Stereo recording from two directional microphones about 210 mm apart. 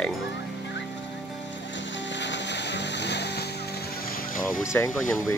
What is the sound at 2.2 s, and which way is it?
Vehicle, 55° left (ahead or behind).